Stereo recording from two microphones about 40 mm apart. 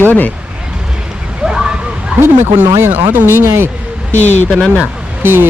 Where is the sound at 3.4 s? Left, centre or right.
Right.